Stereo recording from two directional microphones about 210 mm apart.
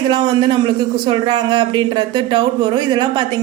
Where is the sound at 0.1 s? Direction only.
20° right (ahead or behind).